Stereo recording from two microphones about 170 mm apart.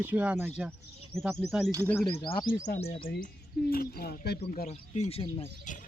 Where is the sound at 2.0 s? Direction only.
30° left (ahead or behind).